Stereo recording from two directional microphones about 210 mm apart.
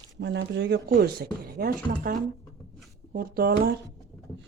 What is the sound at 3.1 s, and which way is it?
Speech, 45° right (ahead or behind).